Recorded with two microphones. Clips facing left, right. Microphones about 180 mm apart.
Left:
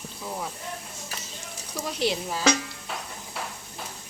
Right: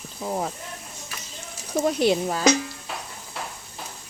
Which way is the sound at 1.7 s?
50° right (ahead or behind).